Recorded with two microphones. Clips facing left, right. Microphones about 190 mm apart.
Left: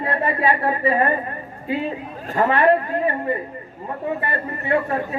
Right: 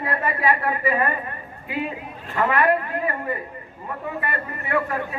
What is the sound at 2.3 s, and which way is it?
A man's voice, 40° left (ahead or behind).